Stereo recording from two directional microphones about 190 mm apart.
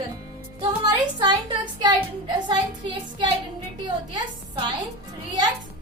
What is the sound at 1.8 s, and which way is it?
A woman's voice, 25° right (ahead or behind).